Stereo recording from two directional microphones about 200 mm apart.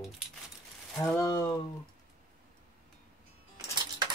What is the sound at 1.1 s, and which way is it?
Speech, 20° left (ahead or behind).